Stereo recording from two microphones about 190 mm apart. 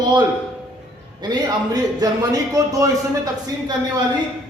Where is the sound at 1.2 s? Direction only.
20° right (ahead or behind).